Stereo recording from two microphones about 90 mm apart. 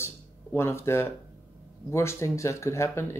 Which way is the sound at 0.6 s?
30° left (ahead or behind).